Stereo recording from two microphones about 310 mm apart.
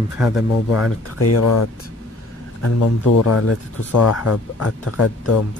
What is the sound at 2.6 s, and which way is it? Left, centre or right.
Speech, left.